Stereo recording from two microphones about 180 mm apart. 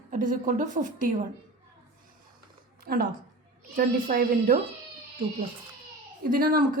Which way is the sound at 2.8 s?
55° right (ahead or behind).